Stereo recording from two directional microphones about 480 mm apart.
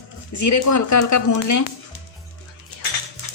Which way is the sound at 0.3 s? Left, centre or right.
Left.